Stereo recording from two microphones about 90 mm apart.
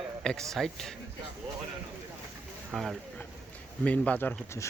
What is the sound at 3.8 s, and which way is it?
Speech, 15° left (ahead or behind).